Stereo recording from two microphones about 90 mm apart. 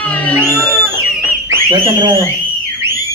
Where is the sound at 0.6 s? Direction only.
15° left (ahead or behind).